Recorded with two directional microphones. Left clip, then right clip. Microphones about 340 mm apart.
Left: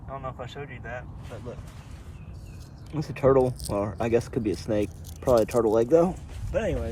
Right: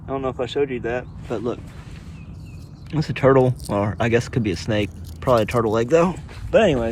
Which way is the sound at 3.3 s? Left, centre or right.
Right.